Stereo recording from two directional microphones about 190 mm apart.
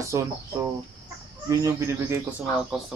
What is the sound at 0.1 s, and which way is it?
A man's voice, 15° right (ahead or behind).